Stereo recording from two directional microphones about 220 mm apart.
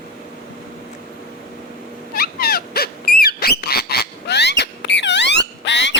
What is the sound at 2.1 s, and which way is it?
Owl, 45° left (ahead or behind).